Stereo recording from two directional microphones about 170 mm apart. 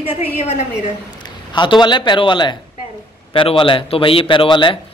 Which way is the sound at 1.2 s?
25° left (ahead or behind).